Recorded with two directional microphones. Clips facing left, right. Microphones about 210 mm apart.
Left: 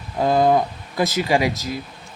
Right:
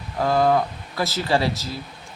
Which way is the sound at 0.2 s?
20° left (ahead or behind).